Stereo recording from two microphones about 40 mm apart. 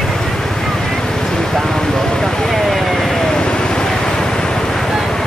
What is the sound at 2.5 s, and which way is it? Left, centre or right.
Vehicle, centre.